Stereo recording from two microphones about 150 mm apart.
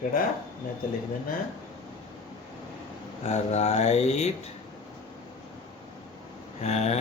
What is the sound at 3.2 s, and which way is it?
A man's voice, 50° left (ahead or behind).